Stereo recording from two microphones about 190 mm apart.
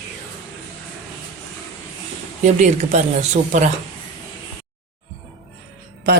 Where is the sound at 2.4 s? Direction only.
40° right (ahead or behind).